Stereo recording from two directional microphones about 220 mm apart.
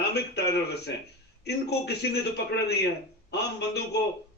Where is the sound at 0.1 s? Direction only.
50° left (ahead or behind).